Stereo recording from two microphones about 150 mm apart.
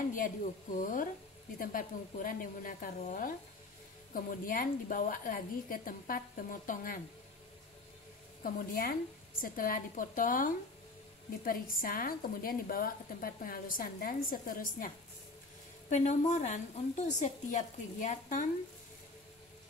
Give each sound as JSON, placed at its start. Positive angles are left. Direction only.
{"t": 0.1, "sound": "a woman's voice", "side_deg": 65}
{"t": 8.4, "sound": "a woman's voice", "side_deg": 70}
{"t": 15.9, "sound": "a woman's voice", "side_deg": 50}